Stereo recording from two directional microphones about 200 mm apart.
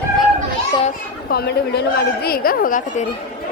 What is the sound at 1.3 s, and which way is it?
Speech, 50° left (ahead or behind).